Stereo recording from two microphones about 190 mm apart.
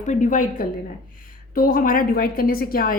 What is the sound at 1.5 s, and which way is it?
A woman's voice, 50° left (ahead or behind).